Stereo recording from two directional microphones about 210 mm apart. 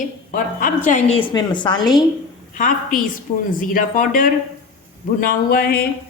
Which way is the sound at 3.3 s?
40° left (ahead or behind).